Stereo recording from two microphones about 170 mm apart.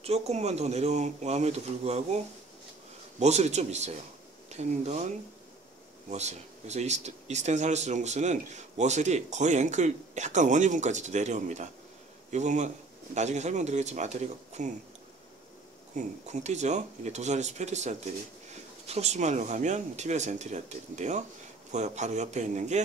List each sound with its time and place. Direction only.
0.0 s speech: 40° right (ahead or behind)
3.2 s speech: 40° right (ahead or behind)
15.9 s speech: 45° right (ahead or behind)